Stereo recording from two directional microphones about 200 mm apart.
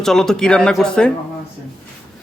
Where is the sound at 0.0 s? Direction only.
Centre (ahead or behind).